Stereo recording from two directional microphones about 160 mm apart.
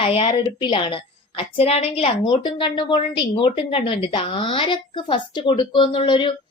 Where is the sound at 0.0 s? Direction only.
35° left (ahead or behind).